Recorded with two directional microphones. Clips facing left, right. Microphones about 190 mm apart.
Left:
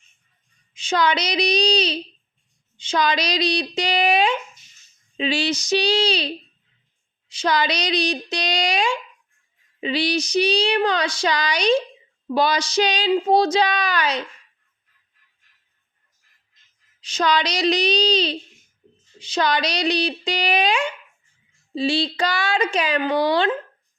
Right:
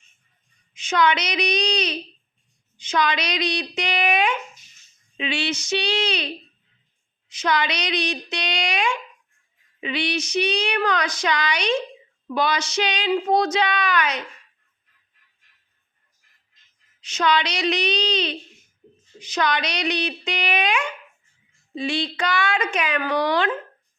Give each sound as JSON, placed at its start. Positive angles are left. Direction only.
{"t": 0.7, "sound": "speech", "side_deg": 30}
{"t": 17.0, "sound": "speech", "side_deg": 35}